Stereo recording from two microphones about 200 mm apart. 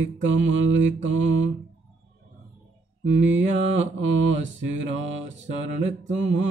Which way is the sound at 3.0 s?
65° right (ahead or behind).